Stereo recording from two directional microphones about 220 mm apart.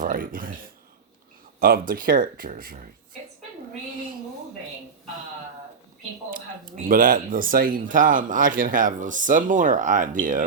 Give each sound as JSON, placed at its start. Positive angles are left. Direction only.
{"t": 0.0, "sound": "a sound", "side_deg": -40}
{"t": 1.5, "sound": "speech", "side_deg": -40}
{"t": 6.3, "sound": "speech", "side_deg": -40}